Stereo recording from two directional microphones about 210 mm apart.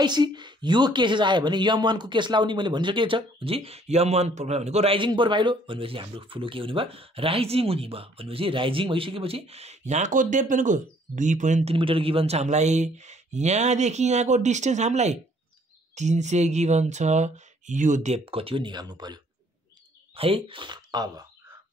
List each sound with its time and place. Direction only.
0.0 s speech: 20° right (ahead or behind)
20.2 s speech: 25° right (ahead or behind)